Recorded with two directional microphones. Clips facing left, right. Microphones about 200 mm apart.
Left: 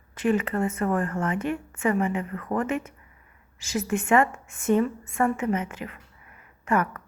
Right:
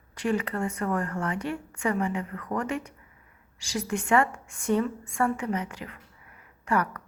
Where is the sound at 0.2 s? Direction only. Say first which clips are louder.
Left 4 dB; 20° left (ahead or behind).